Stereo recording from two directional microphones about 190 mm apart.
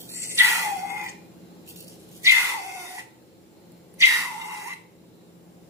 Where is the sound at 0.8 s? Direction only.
15° right (ahead or behind).